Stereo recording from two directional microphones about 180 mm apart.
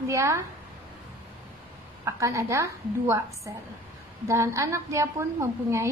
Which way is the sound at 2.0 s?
15° right (ahead or behind).